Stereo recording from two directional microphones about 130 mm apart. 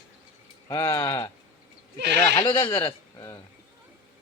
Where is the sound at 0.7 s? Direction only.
25° left (ahead or behind).